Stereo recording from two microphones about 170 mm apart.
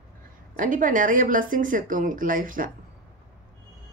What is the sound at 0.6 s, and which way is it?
Speech, 50° right (ahead or behind).